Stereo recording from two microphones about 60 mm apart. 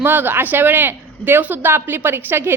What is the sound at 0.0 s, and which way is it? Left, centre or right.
A woman's voice, right.